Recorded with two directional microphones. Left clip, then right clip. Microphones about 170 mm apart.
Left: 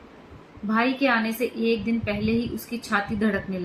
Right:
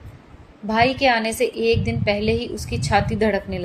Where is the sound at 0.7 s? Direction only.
30° right (ahead or behind).